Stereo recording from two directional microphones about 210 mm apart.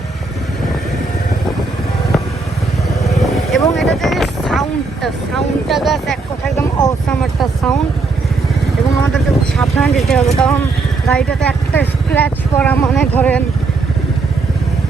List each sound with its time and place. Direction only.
3.2 s vehicle: centre (ahead or behind)
3.8 s boat: centre (ahead or behind)
5.0 s vehicle: centre (ahead or behind)
6.6 s a sound: 15° left (ahead or behind)
7.1 s speech: 5° left (ahead or behind)
9.1 s a woman's voice: centre (ahead or behind)